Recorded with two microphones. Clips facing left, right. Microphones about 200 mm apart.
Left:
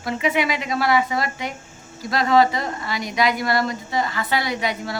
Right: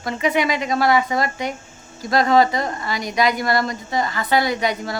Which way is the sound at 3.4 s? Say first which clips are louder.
Right 1 dB; 45° right (ahead or behind).